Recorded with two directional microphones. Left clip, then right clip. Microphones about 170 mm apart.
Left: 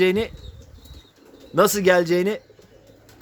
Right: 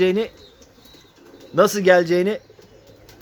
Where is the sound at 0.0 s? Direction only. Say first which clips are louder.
Right 1 dB; 35° left (ahead or behind).